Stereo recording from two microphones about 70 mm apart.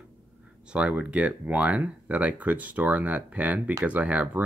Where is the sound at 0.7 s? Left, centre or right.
Centre.